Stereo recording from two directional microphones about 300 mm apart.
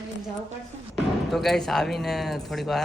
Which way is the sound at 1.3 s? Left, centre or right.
Centre.